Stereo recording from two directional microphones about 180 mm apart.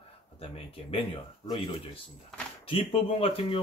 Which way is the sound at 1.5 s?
30° left (ahead or behind).